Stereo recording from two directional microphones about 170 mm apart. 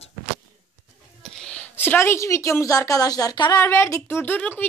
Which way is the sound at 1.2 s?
5° left (ahead or behind).